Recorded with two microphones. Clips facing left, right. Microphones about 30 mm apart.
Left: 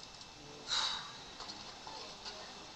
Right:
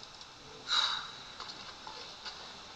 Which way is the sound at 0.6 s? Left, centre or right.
Right.